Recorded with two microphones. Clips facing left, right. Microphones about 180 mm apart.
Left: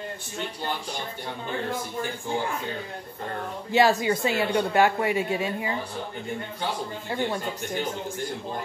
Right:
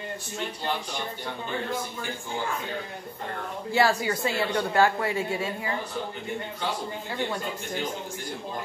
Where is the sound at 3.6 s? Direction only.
20° left (ahead or behind).